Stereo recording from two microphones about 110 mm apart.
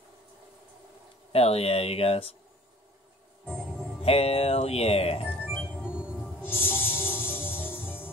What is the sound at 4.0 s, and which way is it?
Music, 65° left (ahead or behind).